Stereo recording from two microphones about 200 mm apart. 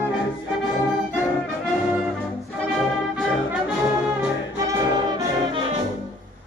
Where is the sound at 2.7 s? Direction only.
Centre (ahead or behind).